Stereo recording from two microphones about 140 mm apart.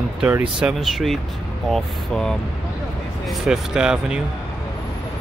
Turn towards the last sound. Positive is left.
turn(degrees=-5)  # may be behind; listen again after turning